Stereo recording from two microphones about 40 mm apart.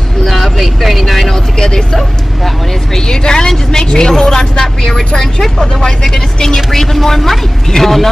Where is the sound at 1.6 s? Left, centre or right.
Centre.